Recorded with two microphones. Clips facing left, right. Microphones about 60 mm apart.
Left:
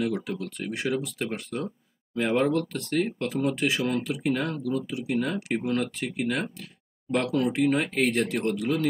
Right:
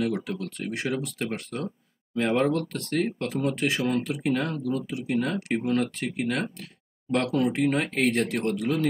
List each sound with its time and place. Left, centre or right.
0.0 s speech: centre